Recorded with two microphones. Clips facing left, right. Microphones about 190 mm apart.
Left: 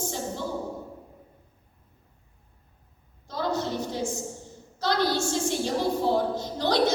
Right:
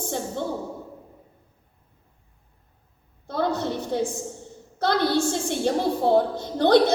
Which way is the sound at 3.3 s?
60° right (ahead or behind).